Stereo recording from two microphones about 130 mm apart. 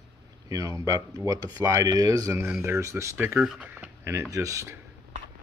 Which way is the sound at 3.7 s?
15° right (ahead or behind).